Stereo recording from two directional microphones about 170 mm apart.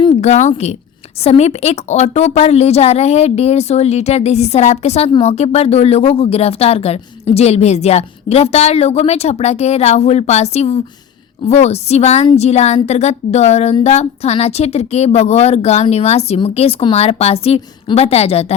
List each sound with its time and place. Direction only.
0.0 s a woman's voice: 35° left (ahead or behind)